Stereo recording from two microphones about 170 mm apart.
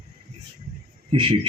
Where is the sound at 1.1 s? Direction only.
30° right (ahead or behind).